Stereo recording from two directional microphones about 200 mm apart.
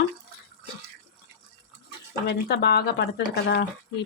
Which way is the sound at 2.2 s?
55° left (ahead or behind).